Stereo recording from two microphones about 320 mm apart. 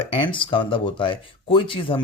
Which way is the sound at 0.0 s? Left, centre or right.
Centre.